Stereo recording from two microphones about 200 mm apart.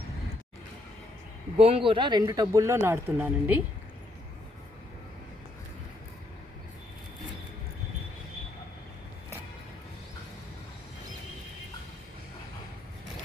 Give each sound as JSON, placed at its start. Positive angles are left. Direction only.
{"t": 1.5, "sound": "speech", "side_deg": -30}